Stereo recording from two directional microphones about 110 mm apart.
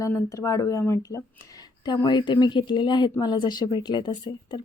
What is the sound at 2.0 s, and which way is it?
Speech, 45° left (ahead or behind).